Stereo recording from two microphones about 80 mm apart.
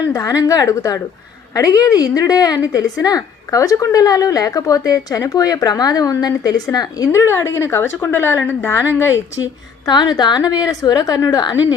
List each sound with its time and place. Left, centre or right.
0.1 s a woman's voice: left
7.3 s a woman's voice: left
9.8 s a woman's voice: left